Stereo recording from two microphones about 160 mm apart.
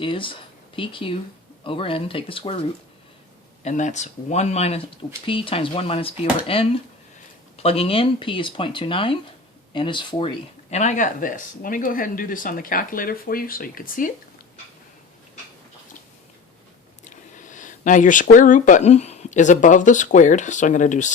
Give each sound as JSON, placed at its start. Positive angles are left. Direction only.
{"t": 0.0, "sound": "speech", "side_deg": 30}
{"t": 3.6, "sound": "speech", "side_deg": 50}
{"t": 17.0, "sound": "speech", "side_deg": 50}